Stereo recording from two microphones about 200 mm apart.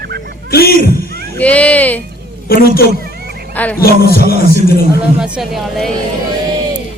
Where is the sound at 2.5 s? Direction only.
50° left (ahead or behind).